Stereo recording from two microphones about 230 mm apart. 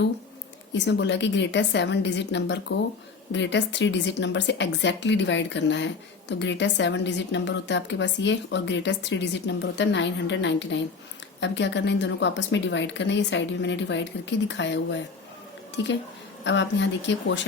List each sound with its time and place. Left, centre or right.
0.7 s a woman's voice: left